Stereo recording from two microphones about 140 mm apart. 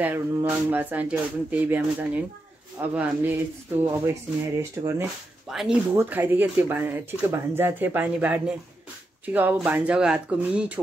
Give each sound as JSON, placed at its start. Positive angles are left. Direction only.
{"t": 0.0, "sound": "speech", "side_deg": -15}
{"t": 5.5, "sound": "speech", "side_deg": -5}
{"t": 5.9, "sound": "speech", "side_deg": -15}